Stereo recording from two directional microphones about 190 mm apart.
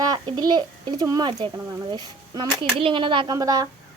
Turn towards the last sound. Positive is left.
turn(degrees=-20)  # may be behind; listen again after turning